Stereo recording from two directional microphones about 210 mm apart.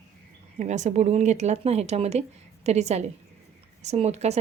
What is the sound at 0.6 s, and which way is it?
Speech, 35° right (ahead or behind).